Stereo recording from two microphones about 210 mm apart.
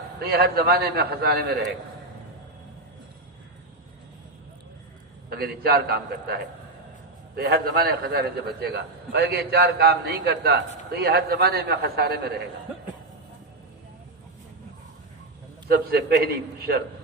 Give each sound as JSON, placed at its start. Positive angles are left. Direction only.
{"t": 0.2, "sound": "a man's voice", "side_deg": -50}
{"t": 5.3, "sound": "a man's voice", "side_deg": -45}
{"t": 15.7, "sound": "a man's voice", "side_deg": -50}